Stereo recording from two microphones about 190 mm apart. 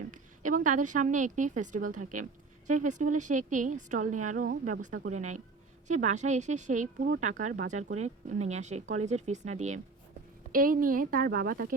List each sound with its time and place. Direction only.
0.1 s speech: 40° right (ahead or behind)
10.5 s speech: 45° right (ahead or behind)